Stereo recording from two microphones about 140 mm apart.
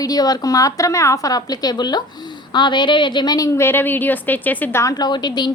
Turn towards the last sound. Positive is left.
turn(degrees=30)  # may be behind; listen again after turning